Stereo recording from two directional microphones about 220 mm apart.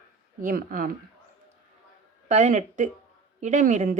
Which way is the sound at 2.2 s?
35° right (ahead or behind).